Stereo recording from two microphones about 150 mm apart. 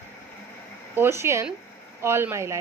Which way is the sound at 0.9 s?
15° right (ahead or behind).